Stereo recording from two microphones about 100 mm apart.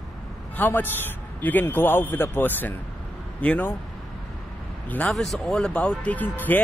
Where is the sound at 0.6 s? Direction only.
20° left (ahead or behind).